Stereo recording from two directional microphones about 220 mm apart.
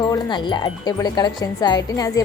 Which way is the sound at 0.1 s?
20° left (ahead or behind).